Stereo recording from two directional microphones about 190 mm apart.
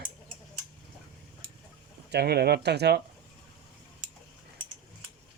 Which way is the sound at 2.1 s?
60° right (ahead or behind).